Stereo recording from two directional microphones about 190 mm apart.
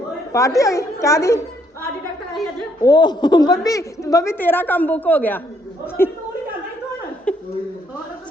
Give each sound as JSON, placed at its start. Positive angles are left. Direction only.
{"t": 0.3, "sound": "a woman's voice", "side_deg": 15}
{"t": 2.8, "sound": "a woman's voice", "side_deg": 20}
{"t": 7.3, "sound": "a sound", "side_deg": 5}